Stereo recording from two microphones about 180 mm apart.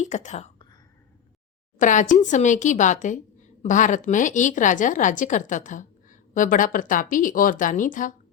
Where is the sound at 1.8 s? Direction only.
45° left (ahead or behind).